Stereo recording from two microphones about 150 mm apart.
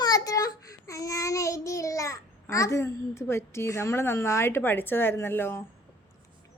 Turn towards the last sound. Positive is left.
turn(degrees=15)  # may be behind; listen again after turning